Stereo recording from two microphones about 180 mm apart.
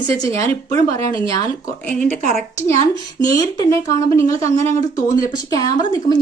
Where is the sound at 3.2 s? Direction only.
20° left (ahead or behind).